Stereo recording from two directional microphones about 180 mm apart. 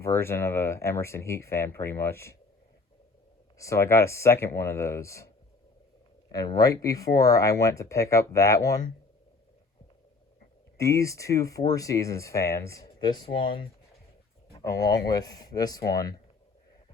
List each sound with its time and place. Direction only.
0.0 s speech: 15° left (ahead or behind)
3.6 s speech: 15° left (ahead or behind)
6.3 s speech: 20° left (ahead or behind)
10.8 s speech: 15° left (ahead or behind)
14.6 s speech: 20° left (ahead or behind)